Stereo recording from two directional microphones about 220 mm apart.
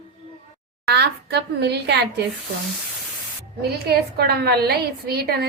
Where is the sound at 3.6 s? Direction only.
45° right (ahead or behind).